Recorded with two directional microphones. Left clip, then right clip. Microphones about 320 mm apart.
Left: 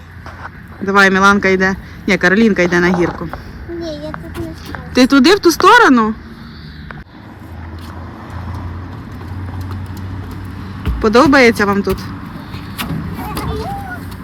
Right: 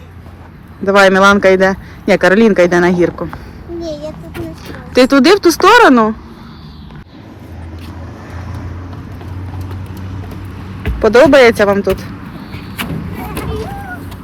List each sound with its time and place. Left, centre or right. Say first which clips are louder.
0.9 s speech: right 2 dB; centre
3.8 s a sound: right 2 dB; left
4.4 s speech: even; centre
11.0 s speech: right 3 dB; centre